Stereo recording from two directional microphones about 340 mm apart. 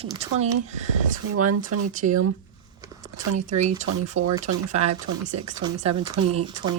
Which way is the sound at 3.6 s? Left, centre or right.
Right.